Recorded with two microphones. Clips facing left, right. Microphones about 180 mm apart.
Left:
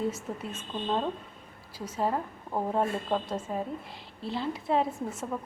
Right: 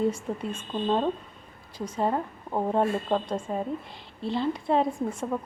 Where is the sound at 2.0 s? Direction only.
20° right (ahead or behind).